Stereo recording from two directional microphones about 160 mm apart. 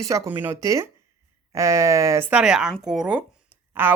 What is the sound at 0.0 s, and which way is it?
Speech, 15° right (ahead or behind).